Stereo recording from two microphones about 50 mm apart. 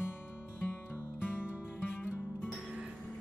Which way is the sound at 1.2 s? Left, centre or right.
Left.